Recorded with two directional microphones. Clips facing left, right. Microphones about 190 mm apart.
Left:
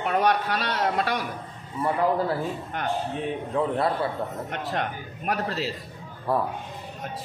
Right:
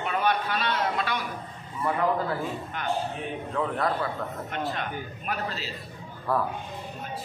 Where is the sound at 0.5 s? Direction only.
45° left (ahead or behind).